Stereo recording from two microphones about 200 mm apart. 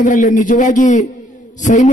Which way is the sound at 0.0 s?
40° left (ahead or behind).